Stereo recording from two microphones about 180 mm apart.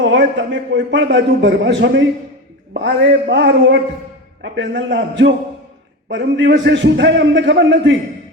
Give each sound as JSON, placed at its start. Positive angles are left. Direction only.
{"t": 0.0, "sound": "a man's voice", "side_deg": -90}
{"t": 1.0, "sound": "a man's voice", "side_deg": -70}